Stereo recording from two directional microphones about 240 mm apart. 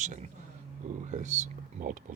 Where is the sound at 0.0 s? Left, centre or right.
Right.